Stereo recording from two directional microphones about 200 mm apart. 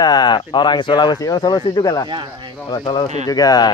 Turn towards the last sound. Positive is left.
turn(degrees=20)  # may be behind; listen again after turning